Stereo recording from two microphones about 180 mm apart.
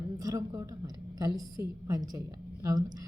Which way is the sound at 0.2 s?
20° right (ahead or behind).